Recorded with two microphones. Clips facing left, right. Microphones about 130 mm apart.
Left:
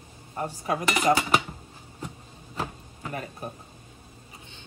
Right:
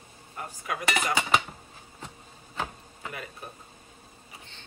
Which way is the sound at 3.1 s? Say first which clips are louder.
Left 5 dB; 40° left (ahead or behind).